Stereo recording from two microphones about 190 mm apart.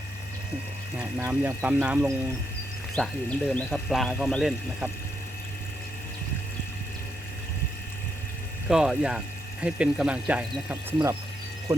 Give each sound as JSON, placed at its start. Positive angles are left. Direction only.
{"t": 0.9, "sound": "speech", "side_deg": -10}
{"t": 2.9, "sound": "speech", "side_deg": 5}
{"t": 8.7, "sound": "speech", "side_deg": -5}